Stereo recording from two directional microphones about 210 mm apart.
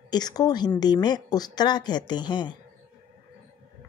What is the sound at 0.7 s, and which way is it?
Speech, 20° left (ahead or behind).